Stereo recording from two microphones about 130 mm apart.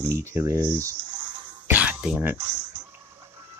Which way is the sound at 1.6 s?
10° right (ahead or behind).